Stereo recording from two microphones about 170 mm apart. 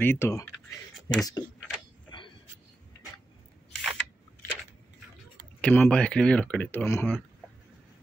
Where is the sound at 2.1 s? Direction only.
25° left (ahead or behind).